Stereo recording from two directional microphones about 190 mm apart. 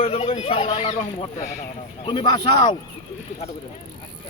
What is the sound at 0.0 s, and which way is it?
Speech, 30° left (ahead or behind).